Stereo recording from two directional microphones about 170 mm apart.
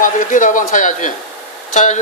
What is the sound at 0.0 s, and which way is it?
A man's voice, 50° left (ahead or behind).